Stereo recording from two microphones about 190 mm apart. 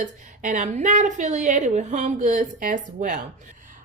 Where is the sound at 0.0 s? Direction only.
40° right (ahead or behind).